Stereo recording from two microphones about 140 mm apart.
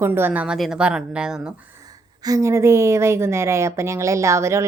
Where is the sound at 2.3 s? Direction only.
20° right (ahead or behind).